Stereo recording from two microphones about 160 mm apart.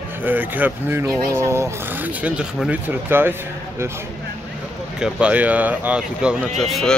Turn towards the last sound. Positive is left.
turn(degrees=0)  # may be behind; listen again after turning